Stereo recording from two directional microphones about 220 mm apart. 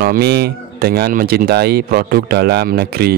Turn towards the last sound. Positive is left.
turn(degrees=-45)  # may be behind; listen again after turning